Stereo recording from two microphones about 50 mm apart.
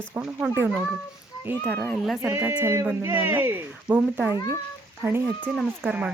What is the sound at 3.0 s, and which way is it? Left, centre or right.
Speech, right.